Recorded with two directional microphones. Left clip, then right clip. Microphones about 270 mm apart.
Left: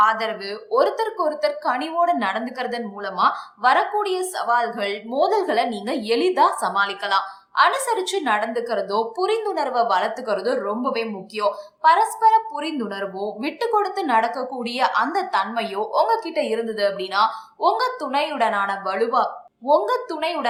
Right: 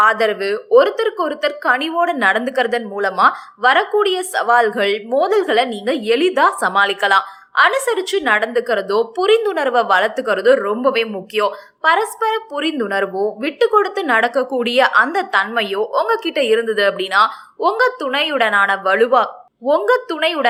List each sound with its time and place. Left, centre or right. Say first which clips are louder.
0.0 s speech: right 5 dB; centre